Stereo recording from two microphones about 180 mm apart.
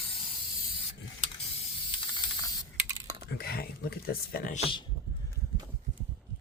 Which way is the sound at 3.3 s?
55° left (ahead or behind).